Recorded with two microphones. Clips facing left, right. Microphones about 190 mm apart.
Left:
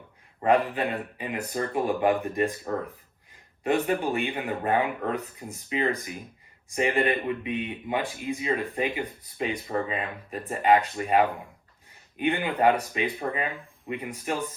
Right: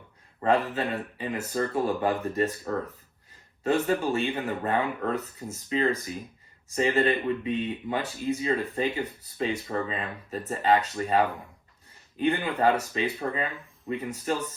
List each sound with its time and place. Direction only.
0.4 s speech: 15° left (ahead or behind)